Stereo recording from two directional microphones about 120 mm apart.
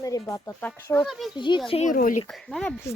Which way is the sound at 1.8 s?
90° left.